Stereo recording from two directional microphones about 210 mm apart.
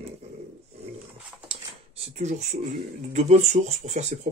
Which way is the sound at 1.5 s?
30° right (ahead or behind).